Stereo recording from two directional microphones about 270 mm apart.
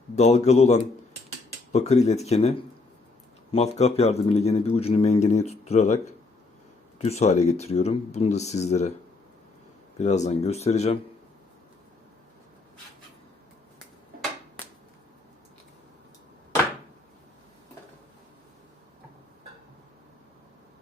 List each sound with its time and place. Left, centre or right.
0.2 s speech: left
7.0 s speech: left
10.0 s speech: left